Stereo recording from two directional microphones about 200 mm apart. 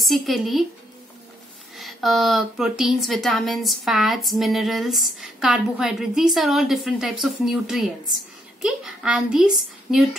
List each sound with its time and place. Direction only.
0.0 s speech: centre (ahead or behind)
1.8 s speech: centre (ahead or behind)